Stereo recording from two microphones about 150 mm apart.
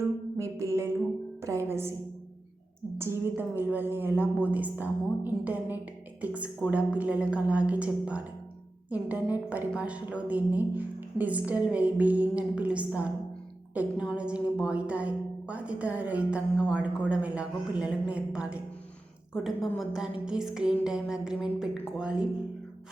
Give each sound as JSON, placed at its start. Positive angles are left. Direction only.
{"t": 0.3, "sound": "music", "side_deg": -20}
{"t": 1.4, "sound": "speech", "side_deg": -20}
{"t": 3.0, "sound": "a woman's voice", "side_deg": -15}
{"t": 19.3, "sound": "a sound", "side_deg": -5}